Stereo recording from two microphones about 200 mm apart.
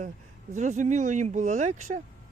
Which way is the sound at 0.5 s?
35° right (ahead or behind).